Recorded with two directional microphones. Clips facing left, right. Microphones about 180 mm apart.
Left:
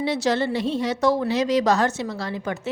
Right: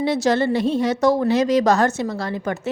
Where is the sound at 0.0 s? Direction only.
50° right (ahead or behind).